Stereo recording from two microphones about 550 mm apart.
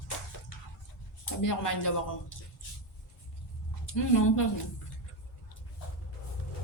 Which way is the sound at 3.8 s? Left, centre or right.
Left.